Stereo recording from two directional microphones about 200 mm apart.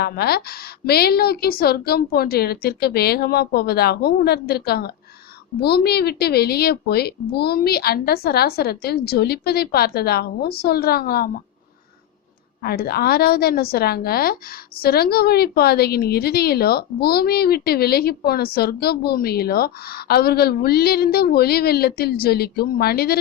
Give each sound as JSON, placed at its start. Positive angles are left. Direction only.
{"t": 0.0, "sound": "a woman's voice", "side_deg": 50}
{"t": 12.6, "sound": "a woman's voice", "side_deg": 50}